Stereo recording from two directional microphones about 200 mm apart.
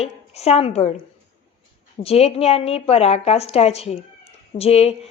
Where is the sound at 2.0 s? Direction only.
30° left (ahead or behind).